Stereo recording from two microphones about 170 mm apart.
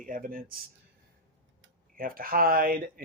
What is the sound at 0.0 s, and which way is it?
Speech, 55° right (ahead or behind).